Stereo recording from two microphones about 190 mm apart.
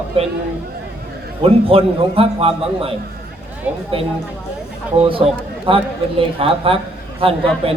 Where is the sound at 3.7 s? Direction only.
10° right (ahead or behind).